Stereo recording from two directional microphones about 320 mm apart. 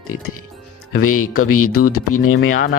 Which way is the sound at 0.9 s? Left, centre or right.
Left.